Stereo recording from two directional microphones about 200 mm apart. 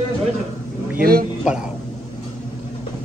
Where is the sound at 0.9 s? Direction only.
50° right (ahead or behind).